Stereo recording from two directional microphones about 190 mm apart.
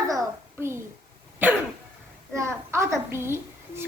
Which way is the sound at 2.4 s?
15° right (ahead or behind).